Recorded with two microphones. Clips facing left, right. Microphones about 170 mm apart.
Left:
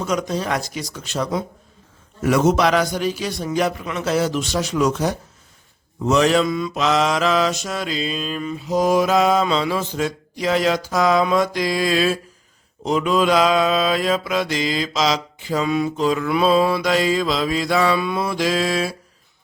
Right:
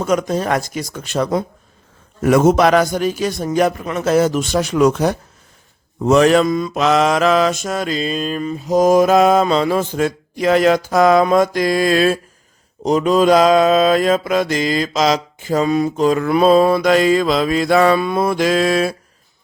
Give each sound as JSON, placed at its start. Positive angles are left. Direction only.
{"t": 0.0, "sound": "mantra", "side_deg": -50}